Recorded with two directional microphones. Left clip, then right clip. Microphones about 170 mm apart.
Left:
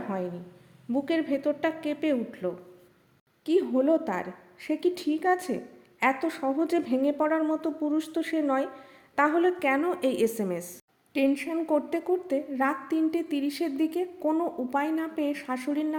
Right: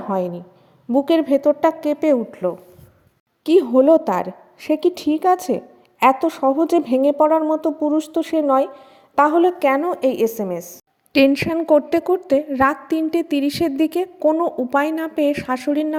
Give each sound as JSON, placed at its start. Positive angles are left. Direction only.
{"t": 0.9, "sound": "a woman's voice", "side_deg": -35}
{"t": 3.4, "sound": "a woman's voice", "side_deg": -45}
{"t": 11.1, "sound": "a woman's voice", "side_deg": -60}